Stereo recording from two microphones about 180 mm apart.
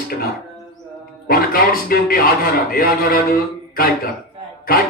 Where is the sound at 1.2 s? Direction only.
55° left (ahead or behind).